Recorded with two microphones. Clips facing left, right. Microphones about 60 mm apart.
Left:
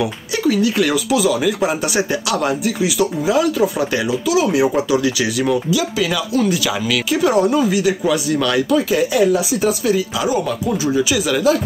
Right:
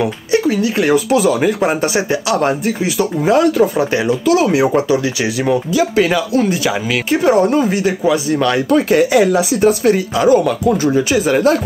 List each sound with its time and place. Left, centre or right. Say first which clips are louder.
0.3 s speech: right 2 dB; right
1.1 s speech: right 3 dB; right
3.3 s speech: right 4 dB; right
4.9 s speech: right 1 dB; right
8.6 s speech: right 4 dB; right